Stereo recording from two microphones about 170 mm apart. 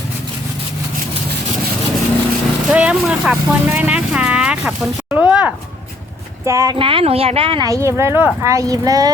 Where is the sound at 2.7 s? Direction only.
5° right (ahead or behind).